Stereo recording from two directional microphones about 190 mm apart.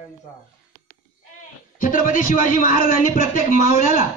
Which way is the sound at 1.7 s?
45° left (ahead or behind).